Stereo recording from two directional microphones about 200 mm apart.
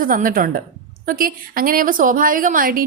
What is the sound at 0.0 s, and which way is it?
A woman's voice, 45° right (ahead or behind).